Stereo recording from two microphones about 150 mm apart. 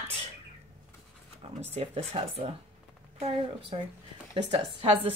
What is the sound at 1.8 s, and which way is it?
Speech, 40° right (ahead or behind).